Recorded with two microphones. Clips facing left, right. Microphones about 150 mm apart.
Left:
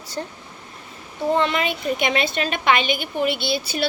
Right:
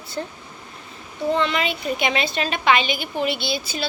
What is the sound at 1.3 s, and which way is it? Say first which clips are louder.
A woman's voice: left 1 dB; 45° left (ahead or behind).